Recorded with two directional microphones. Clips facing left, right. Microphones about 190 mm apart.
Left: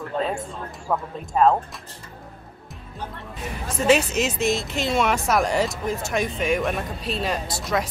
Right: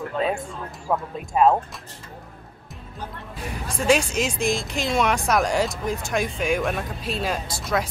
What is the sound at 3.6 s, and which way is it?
Speech, 5° left (ahead or behind).